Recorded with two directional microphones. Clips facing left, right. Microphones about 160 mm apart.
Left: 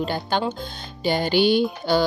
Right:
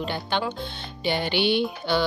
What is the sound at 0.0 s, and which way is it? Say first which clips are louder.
Speech: left 3 dB; 40° left (ahead or behind).